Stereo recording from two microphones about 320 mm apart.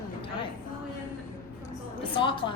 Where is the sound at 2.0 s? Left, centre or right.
Centre.